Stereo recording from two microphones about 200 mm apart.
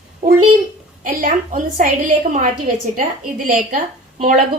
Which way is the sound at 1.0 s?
45° right (ahead or behind).